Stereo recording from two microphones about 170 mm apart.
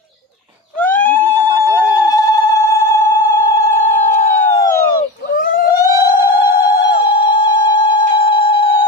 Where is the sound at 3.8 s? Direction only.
45° left (ahead or behind).